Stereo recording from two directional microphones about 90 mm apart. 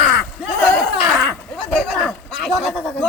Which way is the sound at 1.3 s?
10° left (ahead or behind).